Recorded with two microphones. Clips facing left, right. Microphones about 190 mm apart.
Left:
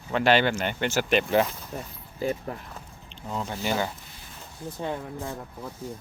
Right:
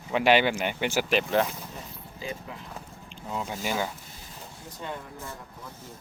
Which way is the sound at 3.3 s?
5° right (ahead or behind).